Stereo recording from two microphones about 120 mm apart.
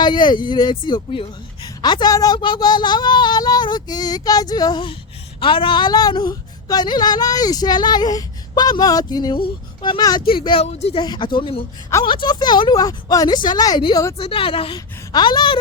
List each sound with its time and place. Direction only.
0.0 s a woman's voice: 40° left (ahead or behind)
10.7 s speech: 65° left (ahead or behind)
10.9 s a woman's voice: 40° left (ahead or behind)
14.2 s a woman's voice: 50° left (ahead or behind)